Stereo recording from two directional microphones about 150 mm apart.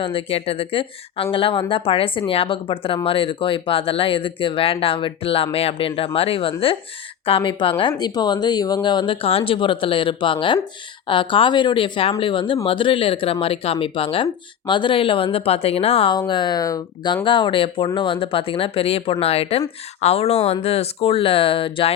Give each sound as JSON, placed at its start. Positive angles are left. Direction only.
{"t": 0.0, "sound": "speech", "side_deg": 35}